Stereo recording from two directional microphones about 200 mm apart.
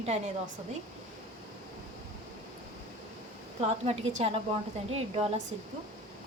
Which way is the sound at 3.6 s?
30° right (ahead or behind).